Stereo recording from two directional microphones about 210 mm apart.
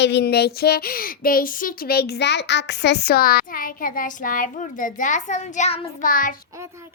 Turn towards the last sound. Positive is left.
turn(degrees=40)  # may be behind; listen again after turning